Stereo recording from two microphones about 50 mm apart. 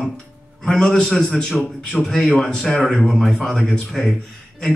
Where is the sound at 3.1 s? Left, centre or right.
Centre.